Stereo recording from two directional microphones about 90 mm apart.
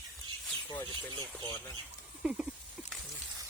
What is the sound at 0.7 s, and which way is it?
Speech, 45° left (ahead or behind).